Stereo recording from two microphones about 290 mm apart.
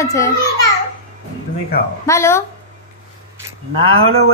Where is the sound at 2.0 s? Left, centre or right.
Centre.